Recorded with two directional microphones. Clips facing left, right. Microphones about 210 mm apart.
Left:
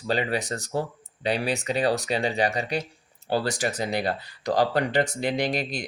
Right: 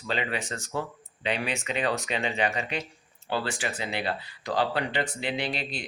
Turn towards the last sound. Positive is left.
turn(degrees=40)  # may be behind; listen again after turning